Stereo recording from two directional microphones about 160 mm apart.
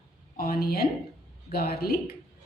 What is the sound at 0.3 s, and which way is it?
A woman's voice, 70° left (ahead or behind).